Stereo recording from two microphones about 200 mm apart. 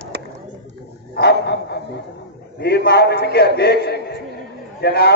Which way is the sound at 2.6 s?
55° left (ahead or behind).